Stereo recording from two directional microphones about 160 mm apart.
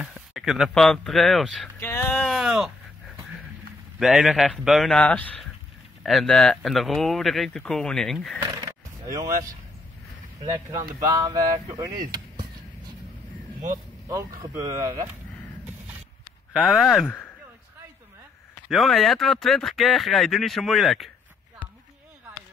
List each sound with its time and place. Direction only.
0.0 s speech: centre (ahead or behind)
1.8 s speech: 15° left (ahead or behind)
2.1 s a sound: 5° left (ahead or behind)
4.0 s speech: centre (ahead or behind)
8.4 s a sound: 20° right (ahead or behind)
10.4 s speech: 20° right (ahead or behind)
14.4 s speech: 20° right (ahead or behind)
16.5 s speech: 5° right (ahead or behind)
18.7 s speech: centre (ahead or behind)